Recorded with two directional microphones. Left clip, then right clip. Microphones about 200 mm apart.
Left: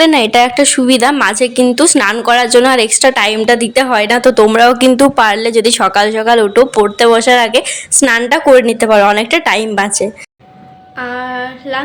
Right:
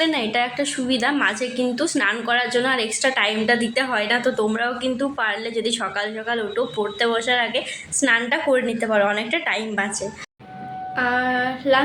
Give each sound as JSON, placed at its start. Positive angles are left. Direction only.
{"t": 0.0, "sound": "a woman's voice", "side_deg": 55}
{"t": 11.0, "sound": "female singing", "side_deg": 0}